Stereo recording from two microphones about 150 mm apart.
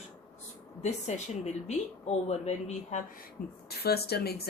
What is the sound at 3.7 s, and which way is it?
Speech, 90° left.